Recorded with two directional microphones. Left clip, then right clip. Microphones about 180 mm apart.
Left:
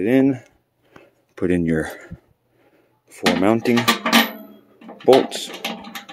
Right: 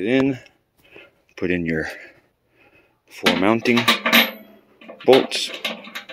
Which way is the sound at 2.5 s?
5° left (ahead or behind).